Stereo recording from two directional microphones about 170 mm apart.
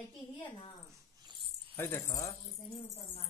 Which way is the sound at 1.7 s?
15° left (ahead or behind).